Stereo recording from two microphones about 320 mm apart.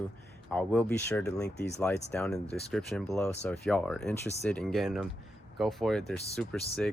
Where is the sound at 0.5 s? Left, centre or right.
Centre.